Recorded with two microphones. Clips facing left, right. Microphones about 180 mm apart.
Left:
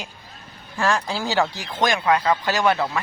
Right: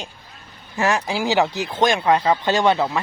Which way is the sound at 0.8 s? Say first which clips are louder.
Right 2 dB; 15° right (ahead or behind).